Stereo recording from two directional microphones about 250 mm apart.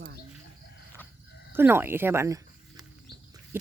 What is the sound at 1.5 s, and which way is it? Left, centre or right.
Speech, centre.